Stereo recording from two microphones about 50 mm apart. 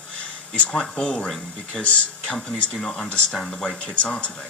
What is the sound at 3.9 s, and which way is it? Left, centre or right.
Speech, left.